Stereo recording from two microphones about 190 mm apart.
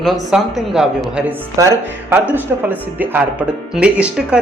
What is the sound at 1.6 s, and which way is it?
Speech, 15° right (ahead or behind).